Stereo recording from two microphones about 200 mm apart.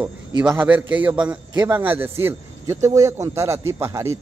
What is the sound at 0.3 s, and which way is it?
A man's voice, 20° right (ahead or behind).